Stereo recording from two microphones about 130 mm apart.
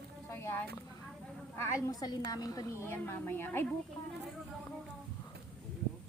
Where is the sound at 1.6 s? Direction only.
30° left (ahead or behind).